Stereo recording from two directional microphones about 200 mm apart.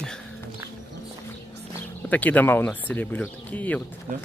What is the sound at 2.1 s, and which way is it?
Speech, 10° left (ahead or behind).